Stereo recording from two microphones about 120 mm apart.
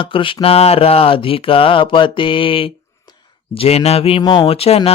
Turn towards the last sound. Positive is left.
turn(degrees=55)  # may be behind; listen again after turning